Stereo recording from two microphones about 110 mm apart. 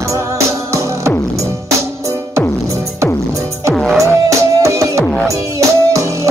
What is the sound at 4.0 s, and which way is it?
Music, 30° right (ahead or behind).